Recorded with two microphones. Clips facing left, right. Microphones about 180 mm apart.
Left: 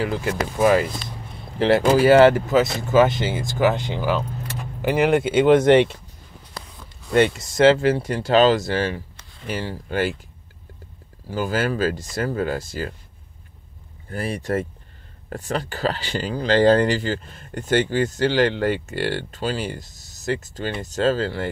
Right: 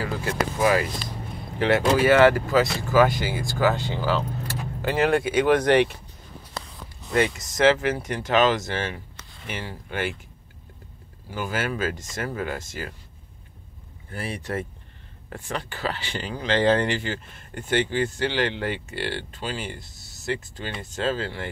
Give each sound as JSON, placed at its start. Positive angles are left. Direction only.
{"t": 0.0, "sound": "speech", "side_deg": 20}
{"t": 7.1, "sound": "speech", "side_deg": 30}
{"t": 11.2, "sound": "speech", "side_deg": 35}
{"t": 14.1, "sound": "speech", "side_deg": 40}